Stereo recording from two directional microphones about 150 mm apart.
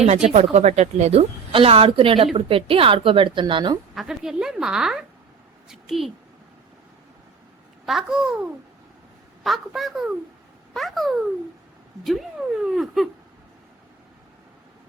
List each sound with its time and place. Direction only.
0.0 s a woman's voice: 50° right (ahead or behind); by 3.8 s 30° right (ahead or behind)
3.9 s a woman's voice: 5° right (ahead or behind)
7.9 s a woman's voice: centre (ahead or behind)
12.6 s a woman's voice: centre (ahead or behind)